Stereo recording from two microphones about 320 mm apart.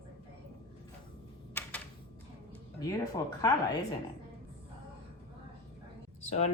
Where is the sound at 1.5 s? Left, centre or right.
Centre.